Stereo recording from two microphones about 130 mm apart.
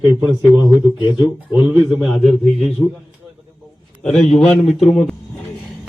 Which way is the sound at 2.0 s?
Centre (ahead or behind).